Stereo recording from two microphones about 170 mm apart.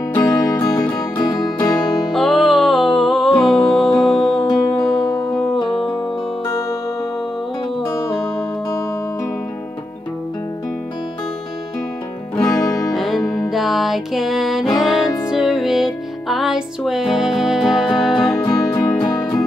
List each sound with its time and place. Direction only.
0.1 s music: 15° left (ahead or behind)
2.1 s music: centre (ahead or behind)
4.5 s music: 20° left (ahead or behind)
5.3 s music: centre (ahead or behind)
5.6 s music: 25° left (ahead or behind)
7.8 s music: 15° left (ahead or behind)
12.4 s music: 20° left (ahead or behind)
12.9 s music: centre (ahead or behind)
18.4 s music: 20° left (ahead or behind)